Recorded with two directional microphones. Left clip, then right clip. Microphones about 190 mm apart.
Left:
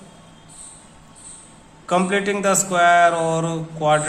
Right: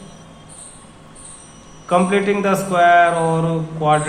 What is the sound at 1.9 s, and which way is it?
Speech, 20° left (ahead or behind).